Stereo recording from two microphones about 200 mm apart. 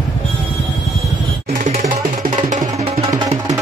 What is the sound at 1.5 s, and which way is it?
Music, 40° right (ahead or behind).